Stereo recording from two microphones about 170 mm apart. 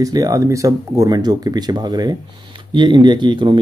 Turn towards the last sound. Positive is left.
turn(degrees=-30)  # may be behind; listen again after turning